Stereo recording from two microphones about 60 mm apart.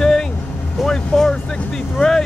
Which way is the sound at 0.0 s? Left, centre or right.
Centre.